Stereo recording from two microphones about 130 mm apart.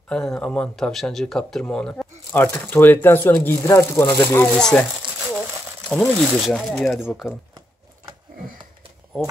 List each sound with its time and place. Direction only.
0.1 s speech: 5° left (ahead or behind)
4.6 s speech: 5° left (ahead or behind)
5.0 s crumpling: 40° right (ahead or behind)
5.9 s speech: 5° left (ahead or behind)